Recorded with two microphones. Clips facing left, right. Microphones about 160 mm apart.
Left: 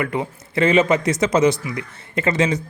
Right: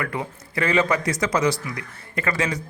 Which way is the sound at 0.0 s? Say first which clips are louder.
Left 5 dB; 20° left (ahead or behind).